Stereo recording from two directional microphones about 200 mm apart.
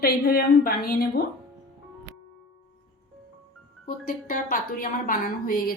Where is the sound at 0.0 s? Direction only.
50° left (ahead or behind).